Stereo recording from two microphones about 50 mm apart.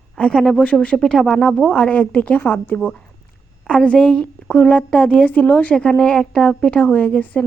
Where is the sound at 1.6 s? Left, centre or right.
Left.